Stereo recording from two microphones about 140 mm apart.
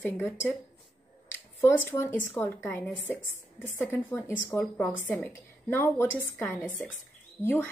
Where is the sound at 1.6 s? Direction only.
15° left (ahead or behind).